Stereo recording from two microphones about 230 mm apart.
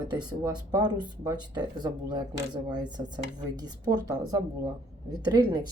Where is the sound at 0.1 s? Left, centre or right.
Centre.